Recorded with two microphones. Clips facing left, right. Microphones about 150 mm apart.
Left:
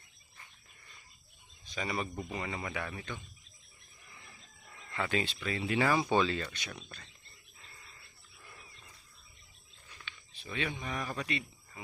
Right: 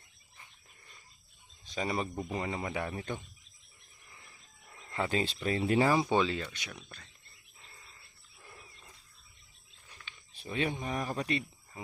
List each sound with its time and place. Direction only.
1.7 s speech: 30° right (ahead or behind)
4.9 s speech: 30° right (ahead or behind)
5.9 s speech: 15° right (ahead or behind)
10.4 s speech: 35° right (ahead or behind)